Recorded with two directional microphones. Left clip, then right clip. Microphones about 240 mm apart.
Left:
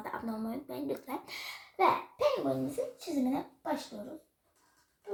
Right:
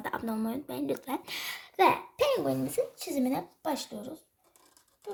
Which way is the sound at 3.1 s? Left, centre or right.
Right.